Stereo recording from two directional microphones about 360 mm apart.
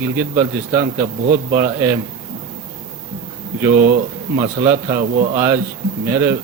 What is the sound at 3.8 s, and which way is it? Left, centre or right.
Speech, centre.